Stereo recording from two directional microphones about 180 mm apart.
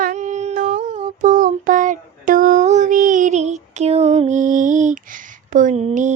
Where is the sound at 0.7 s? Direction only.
40° right (ahead or behind).